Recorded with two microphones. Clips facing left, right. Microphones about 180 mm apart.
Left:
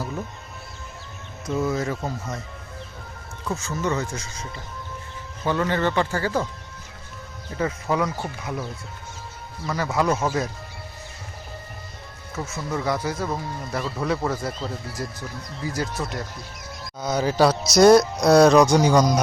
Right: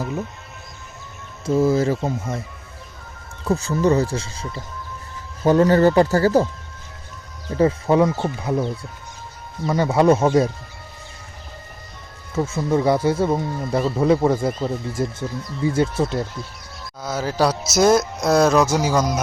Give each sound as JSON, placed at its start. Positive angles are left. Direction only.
{"t": 1.5, "sound": "speech", "side_deg": -30}
{"t": 3.4, "sound": "speech", "side_deg": -35}
{"t": 7.5, "sound": "speech", "side_deg": -30}
{"t": 12.3, "sound": "speech", "side_deg": -30}
{"t": 17.2, "sound": "speech", "side_deg": 0}